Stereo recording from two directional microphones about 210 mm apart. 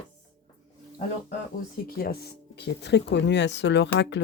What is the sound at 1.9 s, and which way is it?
Speech, 45° left (ahead or behind).